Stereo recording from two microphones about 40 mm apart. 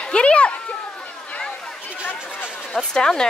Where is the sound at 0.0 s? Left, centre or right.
Left.